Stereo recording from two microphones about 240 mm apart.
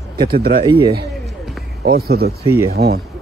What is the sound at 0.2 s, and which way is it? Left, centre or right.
Mantra, right.